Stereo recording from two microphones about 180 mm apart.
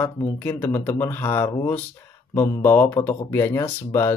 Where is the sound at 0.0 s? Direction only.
10° left (ahead or behind).